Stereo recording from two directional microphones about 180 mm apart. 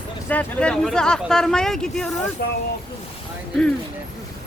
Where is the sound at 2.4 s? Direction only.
60° left (ahead or behind).